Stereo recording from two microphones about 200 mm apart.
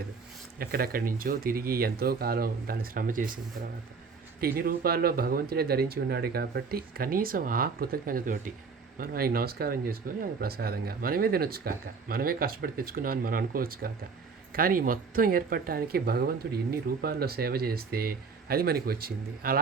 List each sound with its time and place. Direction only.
0.6 s speech: 50° right (ahead or behind)
4.4 s speech: 45° right (ahead or behind)